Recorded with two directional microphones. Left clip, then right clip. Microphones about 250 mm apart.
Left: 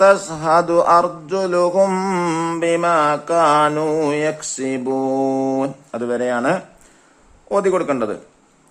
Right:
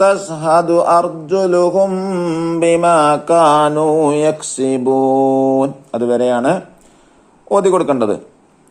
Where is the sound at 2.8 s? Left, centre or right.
Centre.